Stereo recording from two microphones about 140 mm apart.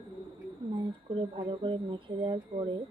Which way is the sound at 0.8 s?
40° right (ahead or behind).